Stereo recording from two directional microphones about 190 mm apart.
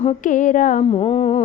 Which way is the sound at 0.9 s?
30° left (ahead or behind).